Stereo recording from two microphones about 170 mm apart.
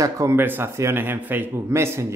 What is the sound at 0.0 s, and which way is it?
A man's voice, 15° right (ahead or behind).